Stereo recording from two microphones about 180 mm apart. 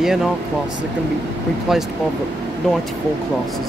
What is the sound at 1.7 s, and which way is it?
Speech, centre (ahead or behind).